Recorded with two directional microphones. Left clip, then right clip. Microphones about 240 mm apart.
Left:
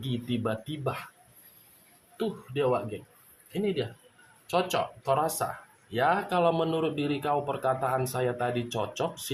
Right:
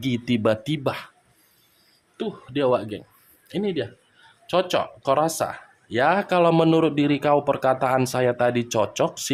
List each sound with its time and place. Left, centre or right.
0.0 s speech: right
2.1 s speech: right